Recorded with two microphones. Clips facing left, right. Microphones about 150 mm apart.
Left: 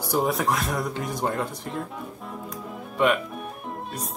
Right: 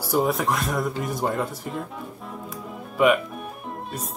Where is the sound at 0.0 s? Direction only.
Centre (ahead or behind).